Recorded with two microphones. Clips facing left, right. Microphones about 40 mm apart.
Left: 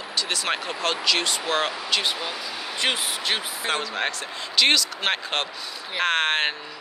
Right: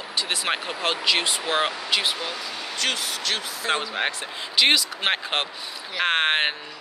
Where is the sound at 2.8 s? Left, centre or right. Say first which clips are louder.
Left 1 dB; left.